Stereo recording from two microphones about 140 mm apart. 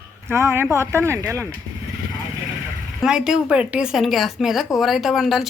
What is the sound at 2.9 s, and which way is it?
A woman's voice, 5° right (ahead or behind).